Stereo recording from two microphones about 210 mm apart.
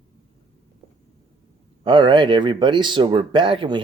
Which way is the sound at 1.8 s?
20° right (ahead or behind).